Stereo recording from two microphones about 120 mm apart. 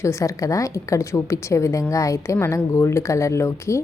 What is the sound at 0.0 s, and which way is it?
A woman's voice, 25° left (ahead or behind).